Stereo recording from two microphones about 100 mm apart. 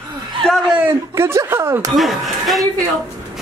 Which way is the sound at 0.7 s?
25° right (ahead or behind).